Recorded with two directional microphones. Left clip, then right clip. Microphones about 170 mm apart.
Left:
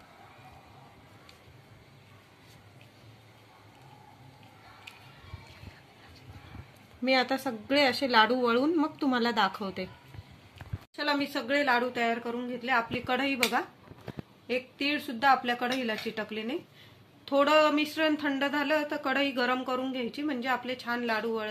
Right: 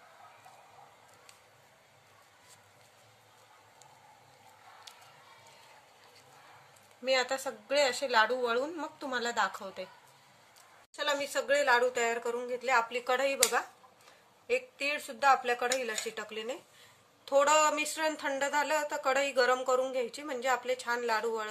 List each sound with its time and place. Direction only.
7.1 s a woman's voice: 10° left (ahead or behind)
11.0 s speech: 25° right (ahead or behind)
13.1 s speech: 10° right (ahead or behind)
14.5 s speech: centre (ahead or behind)
17.2 s speech: 25° right (ahead or behind)